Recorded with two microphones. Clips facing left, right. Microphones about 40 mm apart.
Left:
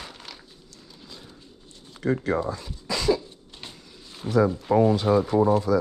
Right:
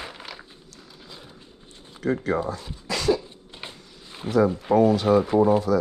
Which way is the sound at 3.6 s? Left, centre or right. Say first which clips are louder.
Right 2 dB; centre.